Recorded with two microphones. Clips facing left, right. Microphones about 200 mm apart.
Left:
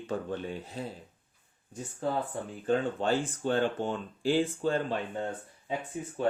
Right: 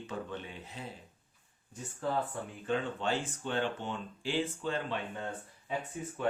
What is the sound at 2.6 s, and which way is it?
Speech, 40° left (ahead or behind).